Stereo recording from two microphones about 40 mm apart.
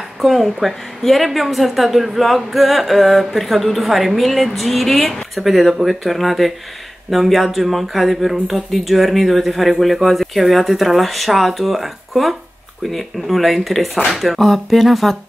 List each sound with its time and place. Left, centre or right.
0.2 s speech: centre